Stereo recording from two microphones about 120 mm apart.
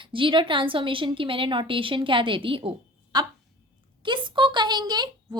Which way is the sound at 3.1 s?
35° right (ahead or behind).